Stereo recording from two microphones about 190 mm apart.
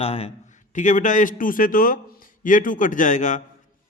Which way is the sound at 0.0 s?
30° left (ahead or behind).